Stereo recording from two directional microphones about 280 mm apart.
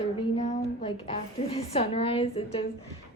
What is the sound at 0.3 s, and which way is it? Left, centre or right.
A woman's voice, left.